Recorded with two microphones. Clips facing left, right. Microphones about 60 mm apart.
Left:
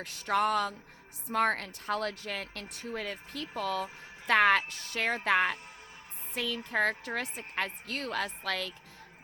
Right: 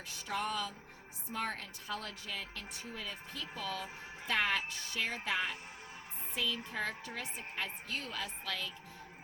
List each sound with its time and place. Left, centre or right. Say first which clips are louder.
0.0 s a woman's voice: left 9 dB; left